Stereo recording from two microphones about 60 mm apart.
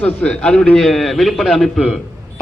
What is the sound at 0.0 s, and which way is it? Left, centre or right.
Speech, left.